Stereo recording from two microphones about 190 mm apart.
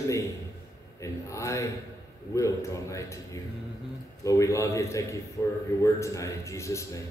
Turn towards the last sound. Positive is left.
turn(degrees=15)  # may be behind; listen again after turning